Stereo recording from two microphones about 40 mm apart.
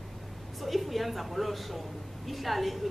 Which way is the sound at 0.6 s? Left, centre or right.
Centre.